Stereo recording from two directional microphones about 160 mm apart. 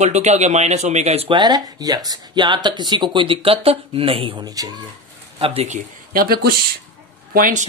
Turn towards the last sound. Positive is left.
turn(degrees=-60)  # may be behind; listen again after turning